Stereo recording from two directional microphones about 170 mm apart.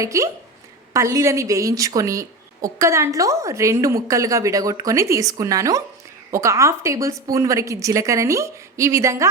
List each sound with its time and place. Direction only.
0.0 s a woman's voice: 15° right (ahead or behind)